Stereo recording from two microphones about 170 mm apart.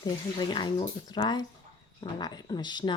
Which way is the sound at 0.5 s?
25° left (ahead or behind).